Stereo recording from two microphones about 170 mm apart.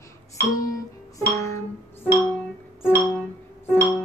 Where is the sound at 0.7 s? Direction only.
20° left (ahead or behind).